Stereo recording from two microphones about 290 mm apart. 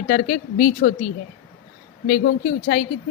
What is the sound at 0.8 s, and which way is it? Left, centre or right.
Speech, left.